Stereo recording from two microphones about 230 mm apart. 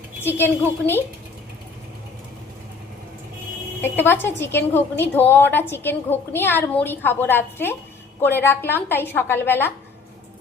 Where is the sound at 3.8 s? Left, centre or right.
Centre.